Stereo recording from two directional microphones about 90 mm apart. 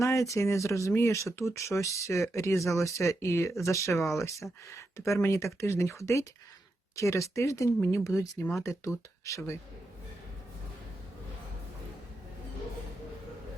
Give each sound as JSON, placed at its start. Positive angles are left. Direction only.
{"t": 0.0, "sound": "speech", "side_deg": 35}